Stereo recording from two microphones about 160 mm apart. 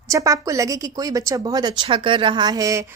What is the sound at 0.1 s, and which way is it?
Speech, 20° right (ahead or behind).